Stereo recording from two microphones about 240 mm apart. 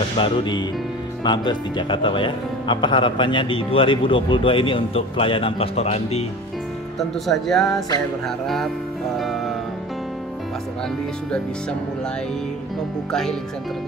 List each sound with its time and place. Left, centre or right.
0.2 s speech: centre
7.0 s speech: centre
9.1 s music: centre
13.1 s speech: centre